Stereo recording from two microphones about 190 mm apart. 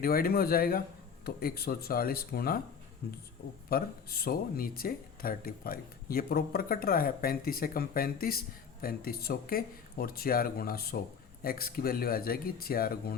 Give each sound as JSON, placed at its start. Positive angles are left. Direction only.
{"t": 0.0, "sound": "speech", "side_deg": 50}
{"t": 3.7, "sound": "speech", "side_deg": 55}